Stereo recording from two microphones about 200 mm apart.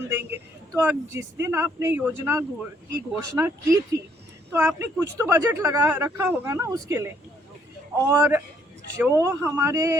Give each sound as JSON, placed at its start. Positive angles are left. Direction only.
{"t": 0.1, "sound": "speech", "side_deg": -10}